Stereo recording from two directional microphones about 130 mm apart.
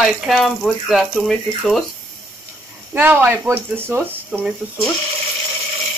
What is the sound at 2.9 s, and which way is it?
Speech, 15° right (ahead or behind).